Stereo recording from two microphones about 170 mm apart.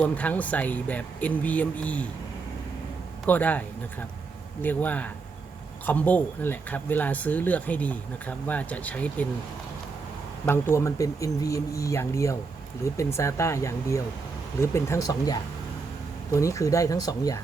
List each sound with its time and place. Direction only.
0.0 s speech: 10° left (ahead or behind)
3.2 s speech: 10° left (ahead or behind)
4.6 s speech: 10° left (ahead or behind)
10.4 s speech: 15° left (ahead or behind)